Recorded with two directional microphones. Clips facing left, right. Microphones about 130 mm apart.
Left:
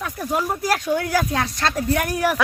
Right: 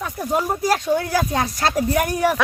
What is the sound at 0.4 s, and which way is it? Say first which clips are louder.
Speech: right 2 dB; 15° right (ahead or behind).